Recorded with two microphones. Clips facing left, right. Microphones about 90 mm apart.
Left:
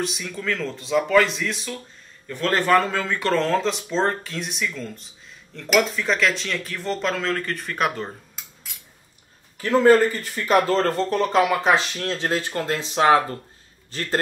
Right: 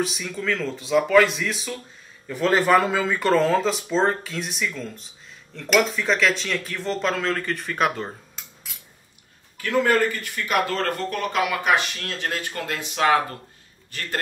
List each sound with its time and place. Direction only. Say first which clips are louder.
0.0 s speech: right 1 dB; centre (ahead or behind)
9.6 s speech: left 5 dB; 30° left (ahead or behind)